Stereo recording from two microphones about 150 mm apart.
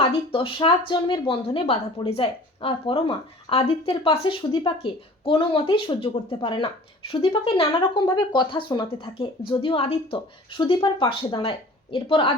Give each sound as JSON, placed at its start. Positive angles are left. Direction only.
{"t": 0.1, "sound": "speech", "side_deg": 40}